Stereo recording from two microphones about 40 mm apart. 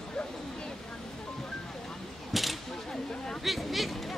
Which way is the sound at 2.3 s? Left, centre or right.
Centre.